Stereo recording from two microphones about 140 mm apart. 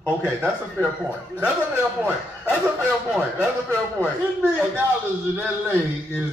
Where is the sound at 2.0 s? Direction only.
10° right (ahead or behind).